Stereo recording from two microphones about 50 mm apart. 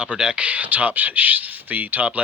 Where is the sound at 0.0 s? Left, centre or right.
Centre.